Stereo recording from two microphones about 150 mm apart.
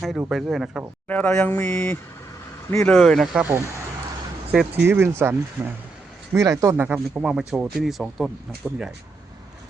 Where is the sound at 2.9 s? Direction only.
Centre (ahead or behind).